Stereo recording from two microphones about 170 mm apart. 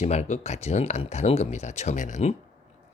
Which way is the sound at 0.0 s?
40° left (ahead or behind).